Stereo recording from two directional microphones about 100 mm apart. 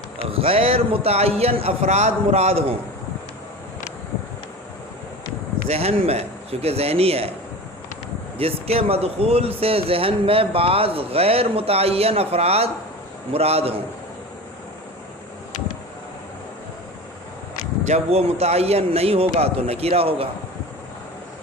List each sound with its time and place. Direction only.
0.3 s a man's voice: 75° right (ahead or behind)
5.6 s a man's voice: 90° right
8.4 s a man's voice: 75° right (ahead or behind)
18.1 s a man's voice: 90° right; by 20.2 s 75° right (ahead or behind)